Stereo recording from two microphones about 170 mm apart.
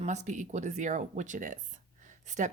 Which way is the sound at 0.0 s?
45° right (ahead or behind).